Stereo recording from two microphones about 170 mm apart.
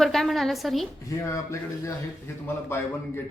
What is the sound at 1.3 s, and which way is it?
A man's voice, 20° left (ahead or behind).